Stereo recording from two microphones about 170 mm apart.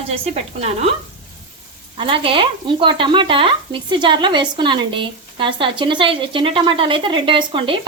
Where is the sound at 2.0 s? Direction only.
30° right (ahead or behind).